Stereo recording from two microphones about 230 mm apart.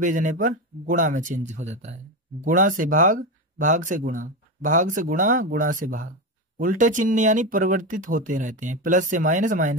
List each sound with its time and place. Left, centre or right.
0.0 s speech: right